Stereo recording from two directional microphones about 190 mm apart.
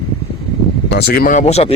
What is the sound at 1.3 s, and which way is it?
Speech, 35° left (ahead or behind).